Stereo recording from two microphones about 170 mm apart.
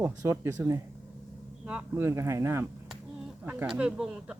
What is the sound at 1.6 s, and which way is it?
Speech, 10° right (ahead or behind).